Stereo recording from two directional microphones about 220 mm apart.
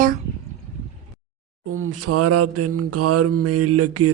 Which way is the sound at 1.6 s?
75° right (ahead or behind).